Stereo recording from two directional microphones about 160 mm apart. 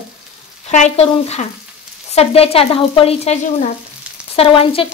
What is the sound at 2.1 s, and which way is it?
Speech, 40° left (ahead or behind).